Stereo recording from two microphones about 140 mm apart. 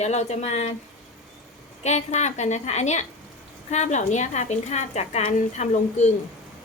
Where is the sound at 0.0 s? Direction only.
55° left (ahead or behind).